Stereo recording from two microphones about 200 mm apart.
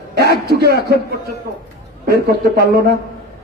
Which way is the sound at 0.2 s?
55° right (ahead or behind).